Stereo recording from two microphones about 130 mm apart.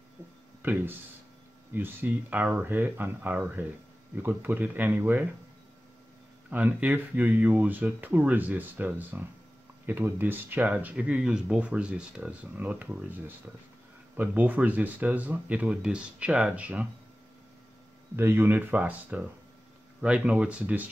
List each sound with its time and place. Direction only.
0.6 s speech: 15° right (ahead or behind)
6.5 s speech: 10° right (ahead or behind)
18.1 s speech: 20° right (ahead or behind)